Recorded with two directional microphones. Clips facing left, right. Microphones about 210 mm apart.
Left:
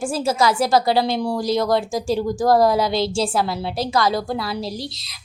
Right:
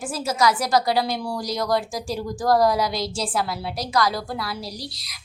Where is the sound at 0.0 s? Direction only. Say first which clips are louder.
Left 3 dB; 30° left (ahead or behind).